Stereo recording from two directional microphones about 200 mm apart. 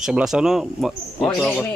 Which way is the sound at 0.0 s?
5° right (ahead or behind).